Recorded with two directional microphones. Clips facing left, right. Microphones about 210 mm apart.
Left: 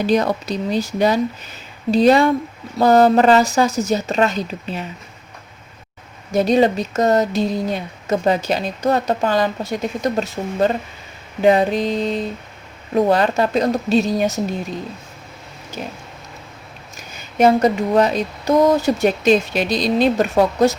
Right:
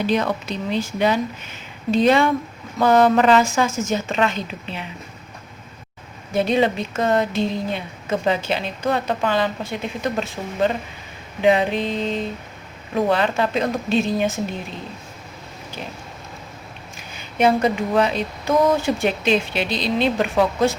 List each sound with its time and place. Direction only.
0.1 s speech: 40° left (ahead or behind)
6.3 s speech: 40° left (ahead or behind)
15.8 s speech: 45° left (ahead or behind)
17.0 s speech: 40° left (ahead or behind)